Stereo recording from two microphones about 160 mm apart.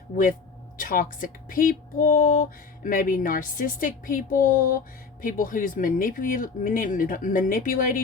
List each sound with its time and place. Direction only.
0.8 s speech: 60° left (ahead or behind)